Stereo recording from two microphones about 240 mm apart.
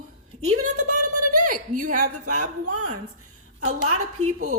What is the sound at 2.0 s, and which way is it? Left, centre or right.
A woman's voice, right.